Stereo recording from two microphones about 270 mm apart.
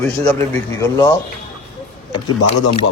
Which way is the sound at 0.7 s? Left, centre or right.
Centre.